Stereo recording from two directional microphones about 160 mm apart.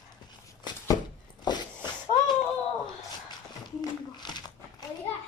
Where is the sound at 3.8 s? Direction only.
25° left (ahead or behind).